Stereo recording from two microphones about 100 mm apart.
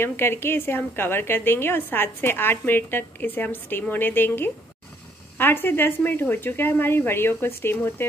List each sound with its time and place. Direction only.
0.0 s a woman's voice: 25° left (ahead or behind)